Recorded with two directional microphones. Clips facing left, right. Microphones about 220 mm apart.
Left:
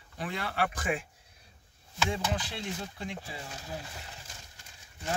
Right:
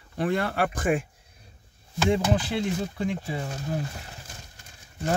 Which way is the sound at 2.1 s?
60° right (ahead or behind).